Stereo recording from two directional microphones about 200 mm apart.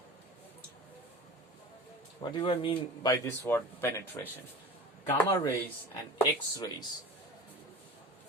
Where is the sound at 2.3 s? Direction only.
25° left (ahead or behind).